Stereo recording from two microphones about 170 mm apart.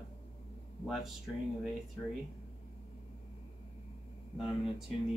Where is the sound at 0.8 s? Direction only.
Centre (ahead or behind).